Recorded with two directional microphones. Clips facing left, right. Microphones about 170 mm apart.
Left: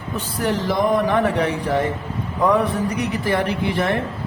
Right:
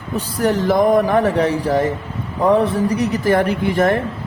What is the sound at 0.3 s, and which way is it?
Speech, 45° right (ahead or behind).